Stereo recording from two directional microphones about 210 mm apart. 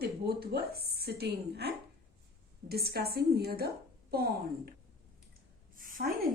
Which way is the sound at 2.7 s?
50° right (ahead or behind).